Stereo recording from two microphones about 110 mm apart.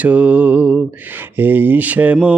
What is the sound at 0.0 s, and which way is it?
Mantra, 10° right (ahead or behind).